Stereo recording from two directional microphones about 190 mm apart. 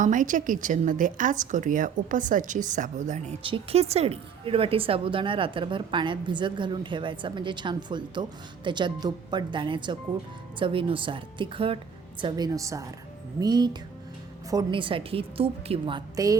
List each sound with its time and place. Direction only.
0.0 s speech: 45° right (ahead or behind); by 16.4 s 15° right (ahead or behind)